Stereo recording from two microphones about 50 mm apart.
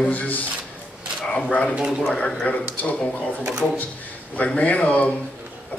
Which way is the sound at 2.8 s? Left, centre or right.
Left.